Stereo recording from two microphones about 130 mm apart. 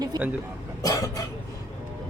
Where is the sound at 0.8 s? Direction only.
25° left (ahead or behind).